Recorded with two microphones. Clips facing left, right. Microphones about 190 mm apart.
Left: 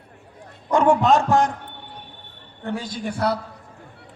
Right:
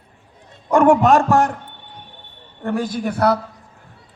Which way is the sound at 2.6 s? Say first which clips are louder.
Right 6 dB; 55° right (ahead or behind).